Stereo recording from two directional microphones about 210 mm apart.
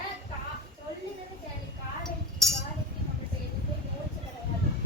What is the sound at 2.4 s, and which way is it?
Chink, centre (ahead or behind).